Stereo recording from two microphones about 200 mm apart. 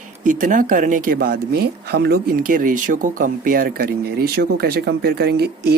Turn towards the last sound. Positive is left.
turn(degrees=-55)  # may be behind; listen again after turning